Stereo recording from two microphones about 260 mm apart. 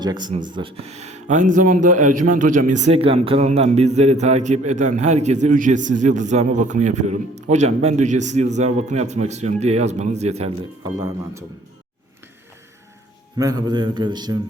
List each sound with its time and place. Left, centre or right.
0.0 s speech: centre
13.4 s a man's voice: centre